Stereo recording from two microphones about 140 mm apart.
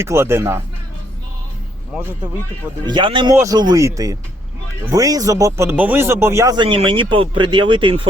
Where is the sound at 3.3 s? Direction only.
25° right (ahead or behind).